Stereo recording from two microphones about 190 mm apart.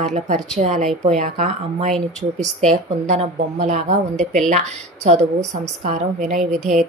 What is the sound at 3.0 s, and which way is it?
Speech, 35° right (ahead or behind).